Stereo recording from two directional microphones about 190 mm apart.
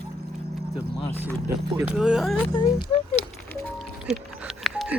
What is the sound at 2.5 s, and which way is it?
Speech, 25° left (ahead or behind).